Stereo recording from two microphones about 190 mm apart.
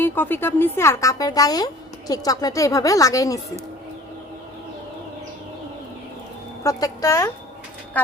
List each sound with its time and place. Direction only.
0.0 s speech: 10° left (ahead or behind)
6.6 s speech: 20° left (ahead or behind)